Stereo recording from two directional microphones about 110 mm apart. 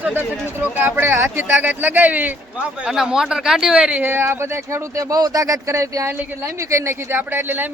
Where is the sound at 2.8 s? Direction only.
5° right (ahead or behind).